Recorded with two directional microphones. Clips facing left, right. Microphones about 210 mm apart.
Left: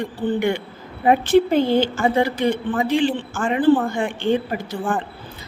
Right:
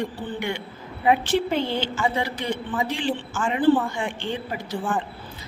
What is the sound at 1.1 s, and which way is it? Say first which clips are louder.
A woman's voice: left 6 dB; 45° left (ahead or behind).